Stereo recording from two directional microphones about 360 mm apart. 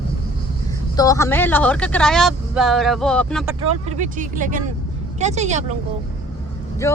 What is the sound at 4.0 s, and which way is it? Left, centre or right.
Speech, right.